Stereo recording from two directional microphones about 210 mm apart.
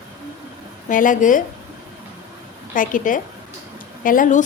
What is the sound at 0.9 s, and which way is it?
Speech, 40° left (ahead or behind).